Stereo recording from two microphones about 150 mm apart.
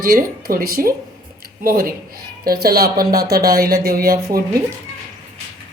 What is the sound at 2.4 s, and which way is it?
Speech, 90° right.